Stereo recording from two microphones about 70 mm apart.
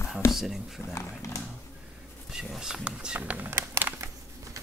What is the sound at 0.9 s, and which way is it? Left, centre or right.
Speech, left.